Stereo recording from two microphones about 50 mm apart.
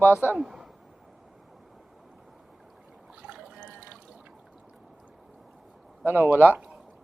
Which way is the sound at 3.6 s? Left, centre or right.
Right.